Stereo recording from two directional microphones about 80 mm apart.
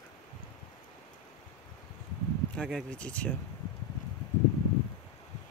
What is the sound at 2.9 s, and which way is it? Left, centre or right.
Speech, centre.